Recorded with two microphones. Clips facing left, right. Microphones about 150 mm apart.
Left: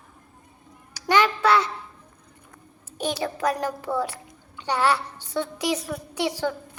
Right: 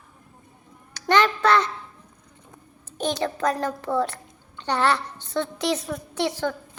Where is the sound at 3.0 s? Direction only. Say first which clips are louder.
Right 1 dB; 10° left (ahead or behind).